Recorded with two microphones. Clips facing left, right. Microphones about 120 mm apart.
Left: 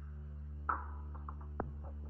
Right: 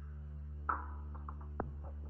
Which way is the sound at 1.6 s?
Centre (ahead or behind).